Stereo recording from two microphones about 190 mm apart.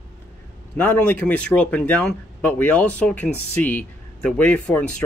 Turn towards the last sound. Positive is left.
turn(degrees=5)  # may be behind; listen again after turning